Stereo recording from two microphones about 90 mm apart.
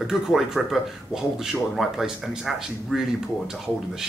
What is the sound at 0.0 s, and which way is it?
Speech, 5° right (ahead or behind).